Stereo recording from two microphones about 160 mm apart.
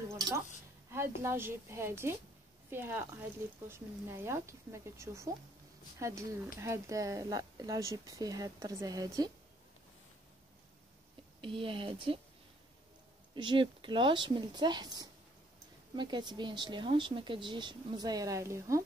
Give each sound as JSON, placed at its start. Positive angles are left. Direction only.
{"t": 0.1, "sound": "a sound", "side_deg": -20}
{"t": 0.9, "sound": "speech", "side_deg": -15}
{"t": 11.4, "sound": "speech", "side_deg": -35}
{"t": 13.3, "sound": "speech", "side_deg": -30}